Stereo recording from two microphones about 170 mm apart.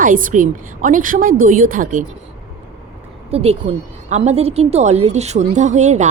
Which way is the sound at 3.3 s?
35° right (ahead or behind).